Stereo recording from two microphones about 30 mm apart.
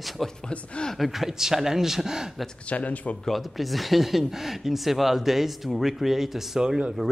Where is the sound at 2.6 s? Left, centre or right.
Left.